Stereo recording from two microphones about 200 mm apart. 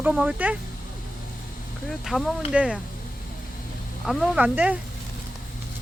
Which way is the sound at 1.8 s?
Centre (ahead or behind).